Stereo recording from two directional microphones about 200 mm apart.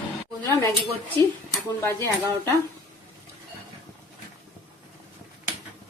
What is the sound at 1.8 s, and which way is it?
Speech, 15° left (ahead or behind).